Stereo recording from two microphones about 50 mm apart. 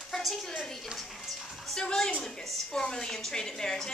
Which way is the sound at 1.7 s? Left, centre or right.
Centre.